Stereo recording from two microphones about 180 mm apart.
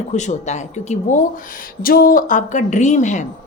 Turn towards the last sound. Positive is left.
turn(degrees=40)  # may be behind; listen again after turning